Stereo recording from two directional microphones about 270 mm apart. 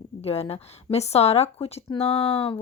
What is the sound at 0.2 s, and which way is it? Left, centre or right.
Speech, left.